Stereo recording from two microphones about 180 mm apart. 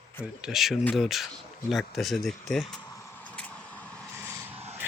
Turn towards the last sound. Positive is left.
turn(degrees=-15)  # may be behind; listen again after turning